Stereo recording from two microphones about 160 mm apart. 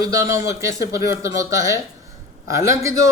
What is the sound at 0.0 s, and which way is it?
Speech, 20° right (ahead or behind).